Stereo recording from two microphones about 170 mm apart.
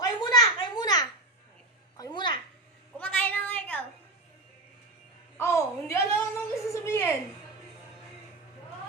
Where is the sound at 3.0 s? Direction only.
10° left (ahead or behind).